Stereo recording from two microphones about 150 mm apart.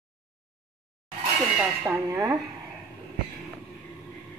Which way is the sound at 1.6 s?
15° right (ahead or behind).